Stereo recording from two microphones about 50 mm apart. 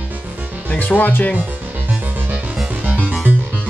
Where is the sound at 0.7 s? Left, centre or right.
Left.